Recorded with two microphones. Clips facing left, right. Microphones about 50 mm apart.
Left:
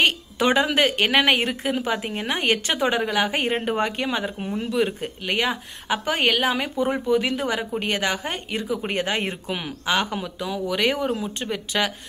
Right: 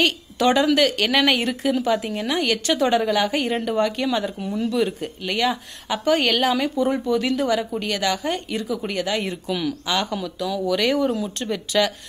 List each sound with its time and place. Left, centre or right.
0.0 s a woman's voice: left